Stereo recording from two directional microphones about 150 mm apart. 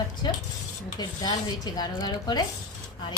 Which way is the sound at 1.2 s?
25° left (ahead or behind).